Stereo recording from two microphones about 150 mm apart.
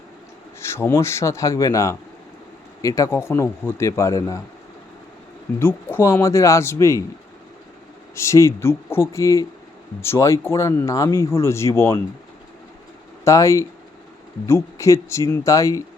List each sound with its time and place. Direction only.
0.7 s speech: 15° left (ahead or behind)
5.5 s speech: 15° left (ahead or behind)
8.1 s speech: 20° left (ahead or behind)
13.2 s speech: 20° left (ahead or behind)